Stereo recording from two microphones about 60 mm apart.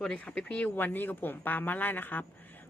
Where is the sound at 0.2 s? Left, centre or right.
Centre.